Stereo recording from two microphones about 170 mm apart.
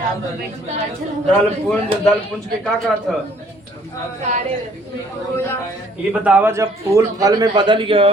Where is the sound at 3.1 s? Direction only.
Centre (ahead or behind).